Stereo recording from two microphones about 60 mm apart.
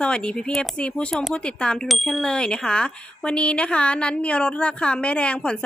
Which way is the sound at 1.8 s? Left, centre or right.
Centre.